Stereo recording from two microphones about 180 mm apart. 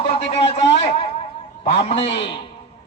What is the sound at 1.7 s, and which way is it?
Speech, 35° left (ahead or behind).